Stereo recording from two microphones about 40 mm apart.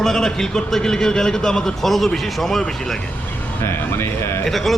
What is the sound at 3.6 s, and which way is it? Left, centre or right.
Speech, left.